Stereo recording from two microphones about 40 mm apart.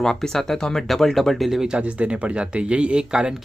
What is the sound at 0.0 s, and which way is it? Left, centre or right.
Speech, centre.